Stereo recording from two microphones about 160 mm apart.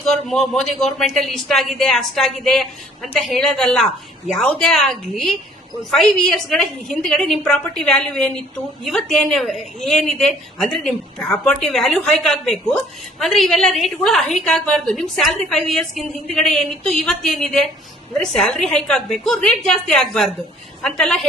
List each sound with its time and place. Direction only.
0.0 s a woman's voice: centre (ahead or behind)